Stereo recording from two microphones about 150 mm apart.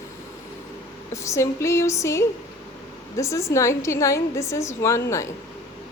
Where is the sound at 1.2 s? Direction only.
20° left (ahead or behind).